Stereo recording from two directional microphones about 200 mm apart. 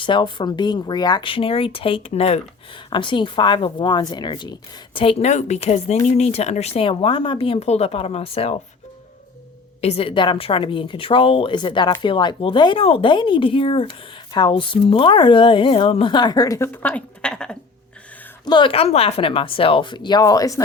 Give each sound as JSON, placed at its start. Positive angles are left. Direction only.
{"t": 0.0, "sound": "a woman's voice", "side_deg": 25}
{"t": 4.9, "sound": "speech", "side_deg": 30}
{"t": 9.8, "sound": "a woman's voice", "side_deg": 30}
{"t": 18.4, "sound": "a woman's voice", "side_deg": 25}